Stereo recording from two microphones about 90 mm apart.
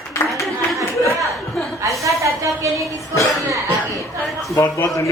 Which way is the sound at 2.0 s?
35° right (ahead or behind).